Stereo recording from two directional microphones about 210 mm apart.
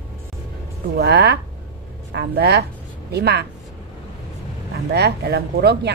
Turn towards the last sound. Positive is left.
turn(degrees=-50)  # may be behind; listen again after turning